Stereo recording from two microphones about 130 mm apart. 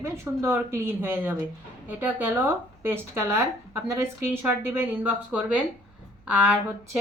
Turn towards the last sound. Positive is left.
turn(degrees=-10)  # may be behind; listen again after turning